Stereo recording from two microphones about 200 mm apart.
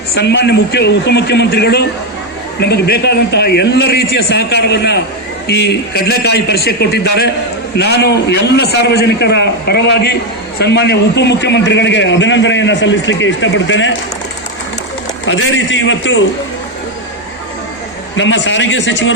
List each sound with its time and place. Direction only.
0.1 s a man's voice: 55° left (ahead or behind)
15.3 s a man's voice: 70° left (ahead or behind)
18.2 s a man's voice: 70° left (ahead or behind)